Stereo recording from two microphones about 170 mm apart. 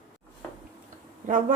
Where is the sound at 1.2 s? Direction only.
50° right (ahead or behind).